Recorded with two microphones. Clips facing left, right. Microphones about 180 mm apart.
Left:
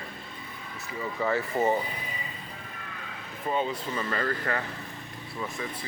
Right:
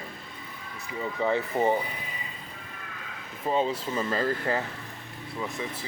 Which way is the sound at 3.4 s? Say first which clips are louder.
Right 3 dB; 30° right (ahead or behind).